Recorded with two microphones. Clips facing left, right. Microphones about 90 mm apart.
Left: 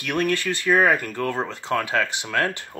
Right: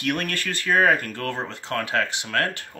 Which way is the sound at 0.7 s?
15° left (ahead or behind).